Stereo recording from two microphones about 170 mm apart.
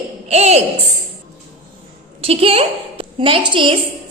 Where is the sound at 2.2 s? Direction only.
35° right (ahead or behind).